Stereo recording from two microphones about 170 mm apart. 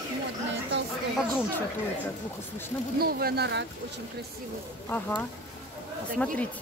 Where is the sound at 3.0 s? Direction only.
65° right (ahead or behind).